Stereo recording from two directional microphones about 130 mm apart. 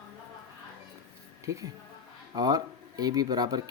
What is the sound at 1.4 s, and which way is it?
A woman's voice, 25° right (ahead or behind).